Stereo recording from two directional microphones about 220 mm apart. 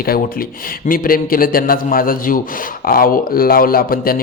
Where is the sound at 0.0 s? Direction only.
40° left (ahead or behind).